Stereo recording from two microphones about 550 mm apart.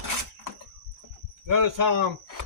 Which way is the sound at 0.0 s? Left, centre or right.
Right.